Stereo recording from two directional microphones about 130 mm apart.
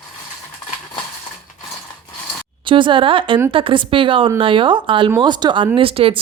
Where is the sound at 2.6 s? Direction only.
40° right (ahead or behind).